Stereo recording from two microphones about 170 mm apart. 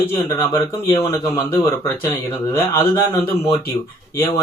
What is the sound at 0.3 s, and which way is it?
Speech, 20° left (ahead or behind).